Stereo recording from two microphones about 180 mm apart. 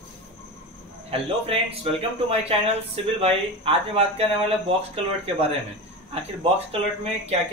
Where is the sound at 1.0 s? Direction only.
30° right (ahead or behind).